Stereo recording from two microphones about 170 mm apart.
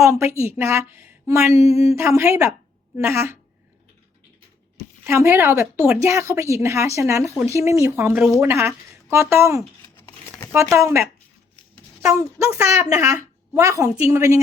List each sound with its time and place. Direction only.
0.0 s a woman's voice: 15° right (ahead or behind)
5.0 s a woman's voice: 15° right (ahead or behind)